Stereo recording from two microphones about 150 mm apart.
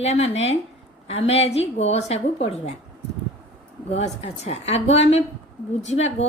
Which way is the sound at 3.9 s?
45° left (ahead or behind).